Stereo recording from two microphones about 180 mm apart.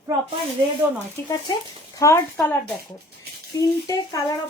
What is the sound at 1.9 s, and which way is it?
A woman's voice, 15° left (ahead or behind).